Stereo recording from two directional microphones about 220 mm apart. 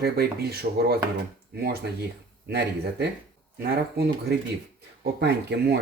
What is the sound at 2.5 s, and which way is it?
Speech, 50° right (ahead or behind).